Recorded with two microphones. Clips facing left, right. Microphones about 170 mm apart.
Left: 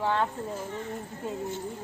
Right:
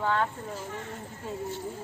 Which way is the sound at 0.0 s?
25° left (ahead or behind).